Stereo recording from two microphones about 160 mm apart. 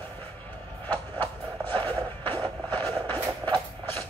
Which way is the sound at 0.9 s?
10° left (ahead or behind).